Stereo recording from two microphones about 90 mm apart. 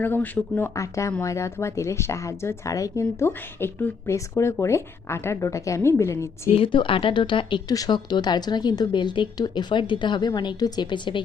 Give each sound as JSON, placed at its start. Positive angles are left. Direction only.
{"t": 0.0, "sound": "speech", "side_deg": 20}
{"t": 0.8, "sound": "speech", "side_deg": 35}
{"t": 6.5, "sound": "a woman's voice", "side_deg": 80}